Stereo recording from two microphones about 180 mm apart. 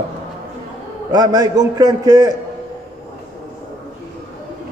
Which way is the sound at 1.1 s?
20° right (ahead or behind).